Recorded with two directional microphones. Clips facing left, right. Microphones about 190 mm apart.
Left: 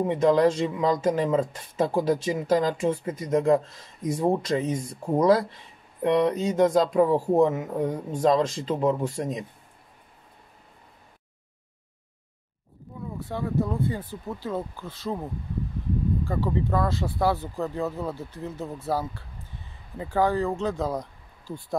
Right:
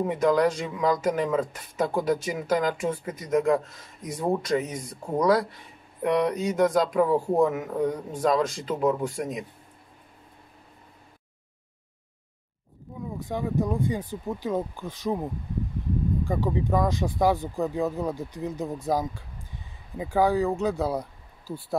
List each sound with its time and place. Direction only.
0.1 s speech: 25° left (ahead or behind)
13.2 s speech: 15° right (ahead or behind)
16.3 s speech: 15° right (ahead or behind)